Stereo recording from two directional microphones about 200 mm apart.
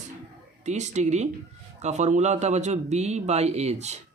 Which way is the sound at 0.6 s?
35° right (ahead or behind).